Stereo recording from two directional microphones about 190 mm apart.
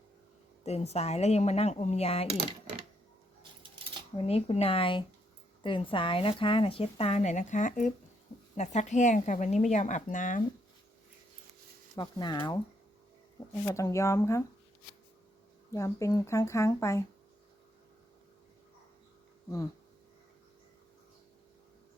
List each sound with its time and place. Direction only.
0.6 s speech: 35° left (ahead or behind)
4.2 s a woman's voice: 30° left (ahead or behind)
11.9 s a woman's voice: 20° left (ahead or behind)
13.7 s speech: 15° left (ahead or behind)
15.7 s speech: 15° left (ahead or behind)